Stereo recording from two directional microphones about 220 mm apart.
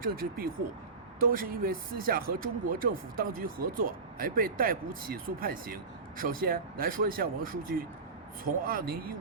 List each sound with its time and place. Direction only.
0.0 s speech: 40° right (ahead or behind)